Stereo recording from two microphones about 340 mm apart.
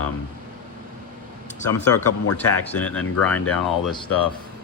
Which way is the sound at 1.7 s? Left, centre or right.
Left.